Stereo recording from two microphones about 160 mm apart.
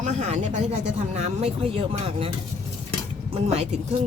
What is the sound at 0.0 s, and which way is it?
Speech, 45° right (ahead or behind).